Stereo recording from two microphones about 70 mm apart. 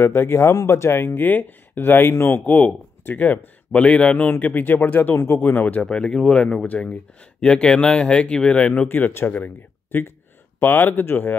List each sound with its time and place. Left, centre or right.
0.0 s speech: left
5.9 s speech: centre
8.8 s speech: left